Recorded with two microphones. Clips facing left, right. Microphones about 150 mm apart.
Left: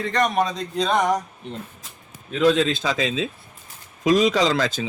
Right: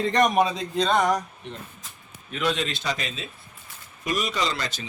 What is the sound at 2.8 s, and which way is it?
Speech, 90° left.